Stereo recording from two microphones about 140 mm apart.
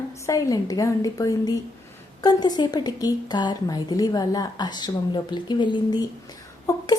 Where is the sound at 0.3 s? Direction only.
25° left (ahead or behind).